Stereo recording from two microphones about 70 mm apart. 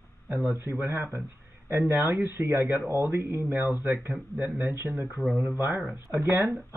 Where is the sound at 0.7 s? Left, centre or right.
Right.